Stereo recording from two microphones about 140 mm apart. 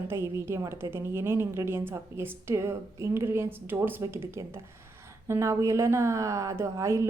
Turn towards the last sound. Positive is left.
turn(degrees=-20)  # may be behind; listen again after turning